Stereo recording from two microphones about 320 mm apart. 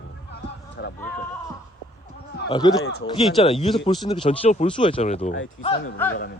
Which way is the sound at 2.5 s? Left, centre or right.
Centre.